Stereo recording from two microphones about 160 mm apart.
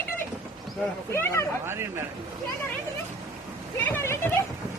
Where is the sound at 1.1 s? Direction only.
15° left (ahead or behind).